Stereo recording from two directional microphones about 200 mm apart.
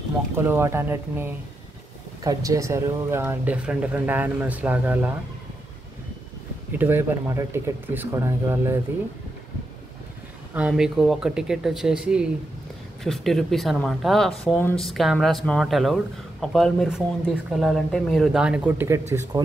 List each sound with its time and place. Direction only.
0.4 s speech: 10° right (ahead or behind)
6.8 s speech: 10° right (ahead or behind)
10.5 s speech: 5° right (ahead or behind)